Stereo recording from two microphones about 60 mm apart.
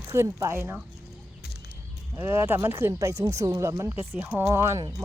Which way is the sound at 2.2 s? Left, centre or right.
Right.